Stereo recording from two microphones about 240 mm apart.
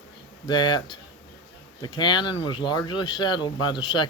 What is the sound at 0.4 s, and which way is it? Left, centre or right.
Speech, centre.